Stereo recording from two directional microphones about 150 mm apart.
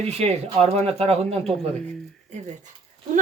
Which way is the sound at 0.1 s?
45° right (ahead or behind).